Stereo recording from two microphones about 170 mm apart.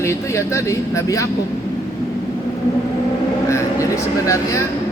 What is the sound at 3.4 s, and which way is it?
Speech, 15° left (ahead or behind).